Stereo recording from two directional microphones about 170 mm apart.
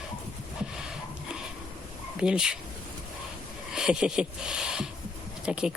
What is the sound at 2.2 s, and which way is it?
Speech, 5° right (ahead or behind).